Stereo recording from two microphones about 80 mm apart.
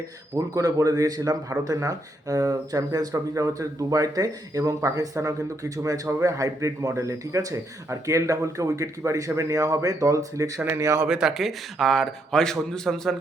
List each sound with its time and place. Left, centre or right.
0.3 s a man's voice: right
11.0 s speech: centre